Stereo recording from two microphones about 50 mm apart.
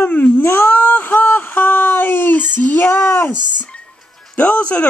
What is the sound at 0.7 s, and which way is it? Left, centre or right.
Speech, left.